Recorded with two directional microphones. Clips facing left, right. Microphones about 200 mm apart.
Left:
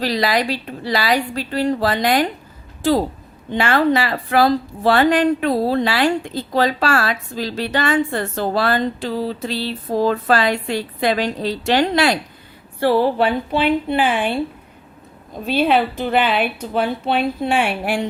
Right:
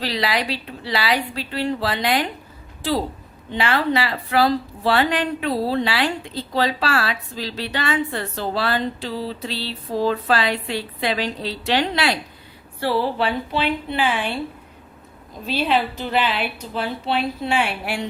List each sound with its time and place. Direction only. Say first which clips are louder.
0.0 s a woman's voice: left 4 dB; 45° left (ahead or behind)
3.5 s a woman's voice: left 4 dB; 50° left (ahead or behind)
15.4 s a woman's voice: left 4 dB; 55° left (ahead or behind)